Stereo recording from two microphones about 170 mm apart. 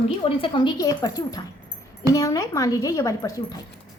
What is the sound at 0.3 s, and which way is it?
A child's voice, 30° left (ahead or behind).